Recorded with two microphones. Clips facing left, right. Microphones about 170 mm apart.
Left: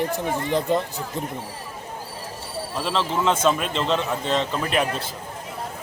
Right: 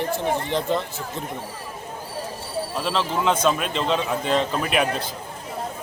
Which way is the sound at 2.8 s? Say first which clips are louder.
Left 1 dB; 5° right (ahead or behind).